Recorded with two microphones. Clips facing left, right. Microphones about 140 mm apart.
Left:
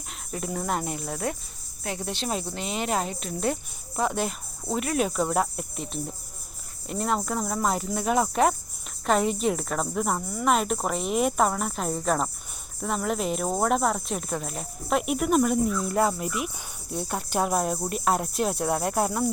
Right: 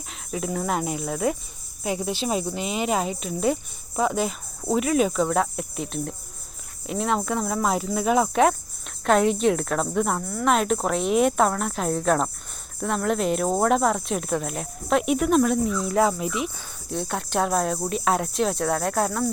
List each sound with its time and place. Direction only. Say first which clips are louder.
0.1 s speech: right 4 dB; centre (ahead or behind)